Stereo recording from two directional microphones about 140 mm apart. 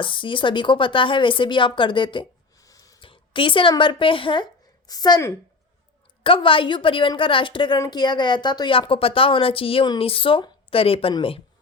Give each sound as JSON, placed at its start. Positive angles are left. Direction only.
{"t": 0.0, "sound": "a woman's voice", "side_deg": 35}
{"t": 2.6, "sound": "a sound", "side_deg": 25}
{"t": 3.0, "sound": "a woman's voice", "side_deg": 40}
{"t": 6.2, "sound": "a woman's voice", "side_deg": 40}